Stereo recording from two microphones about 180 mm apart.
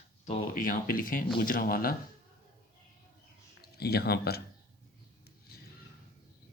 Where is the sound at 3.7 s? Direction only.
60° left (ahead or behind).